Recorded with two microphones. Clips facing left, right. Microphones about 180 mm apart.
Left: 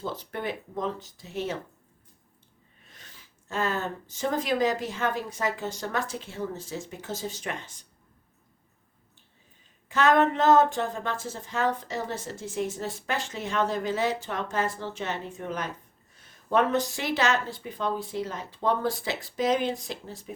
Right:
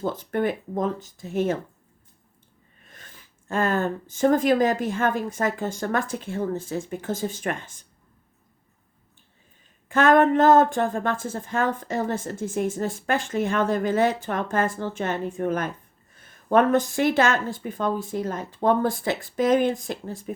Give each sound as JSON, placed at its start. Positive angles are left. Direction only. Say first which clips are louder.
{"t": 0.0, "sound": "speech", "louder": "right 8 dB", "side_deg": -50}
{"t": 2.8, "sound": "speech", "louder": "right 4 dB", "side_deg": -50}
{"t": 9.9, "sound": "speech", "louder": "right 5 dB", "side_deg": -50}